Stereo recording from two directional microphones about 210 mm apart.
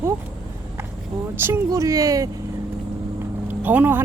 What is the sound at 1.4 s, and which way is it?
Speech, 10° right (ahead or behind).